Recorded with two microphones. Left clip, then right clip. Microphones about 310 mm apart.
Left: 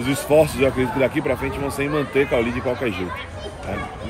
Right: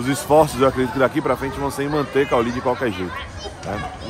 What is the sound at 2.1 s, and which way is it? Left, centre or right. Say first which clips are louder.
Speech: right 2 dB; right.